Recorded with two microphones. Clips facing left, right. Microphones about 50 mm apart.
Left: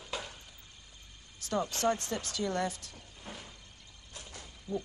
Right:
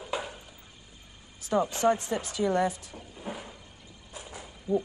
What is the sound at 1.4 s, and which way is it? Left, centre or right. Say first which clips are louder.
Speech: right 6 dB; centre.